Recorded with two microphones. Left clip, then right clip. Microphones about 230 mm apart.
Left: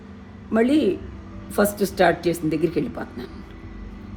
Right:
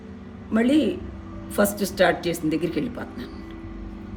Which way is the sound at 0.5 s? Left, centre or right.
Centre.